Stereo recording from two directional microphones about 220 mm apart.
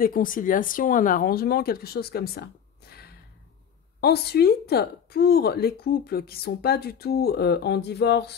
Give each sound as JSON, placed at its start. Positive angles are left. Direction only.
{"t": 0.0, "sound": "speech", "side_deg": 40}
{"t": 2.9, "sound": "gasp", "side_deg": 45}
{"t": 4.0, "sound": "a woman's voice", "side_deg": 45}